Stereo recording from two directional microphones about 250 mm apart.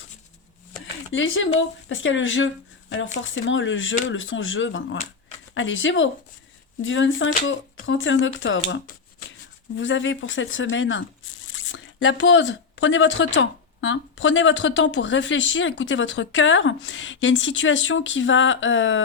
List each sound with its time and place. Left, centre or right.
1.1 s speech: left
9.7 s speech: left